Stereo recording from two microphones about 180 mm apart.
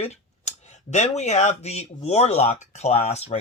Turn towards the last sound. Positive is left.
turn(degrees=35)  # may be behind; listen again after turning